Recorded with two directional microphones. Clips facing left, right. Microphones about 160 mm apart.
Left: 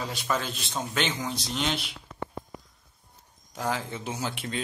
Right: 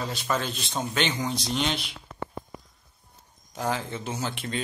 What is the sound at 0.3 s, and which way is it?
A man's voice, 5° left (ahead or behind).